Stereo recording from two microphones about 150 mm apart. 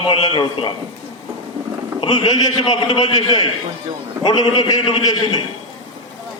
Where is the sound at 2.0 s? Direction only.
40° left (ahead or behind).